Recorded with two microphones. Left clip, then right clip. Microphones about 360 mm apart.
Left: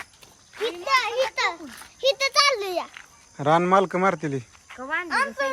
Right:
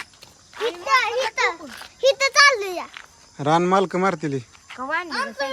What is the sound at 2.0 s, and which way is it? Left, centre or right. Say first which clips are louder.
Speech: right 5 dB; centre.